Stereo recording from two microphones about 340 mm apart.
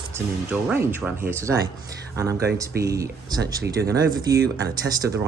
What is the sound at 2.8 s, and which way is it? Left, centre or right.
Speech, centre.